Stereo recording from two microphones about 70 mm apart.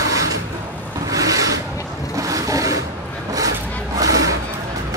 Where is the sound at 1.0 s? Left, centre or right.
Right.